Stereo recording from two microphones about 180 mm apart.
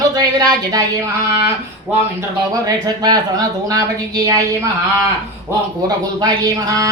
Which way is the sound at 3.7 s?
20° right (ahead or behind).